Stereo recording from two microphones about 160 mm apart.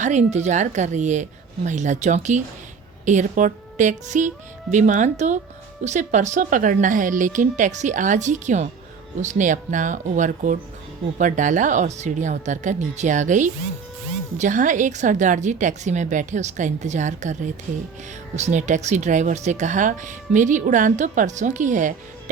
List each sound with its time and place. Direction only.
0.0 s speech: 45° right (ahead or behind)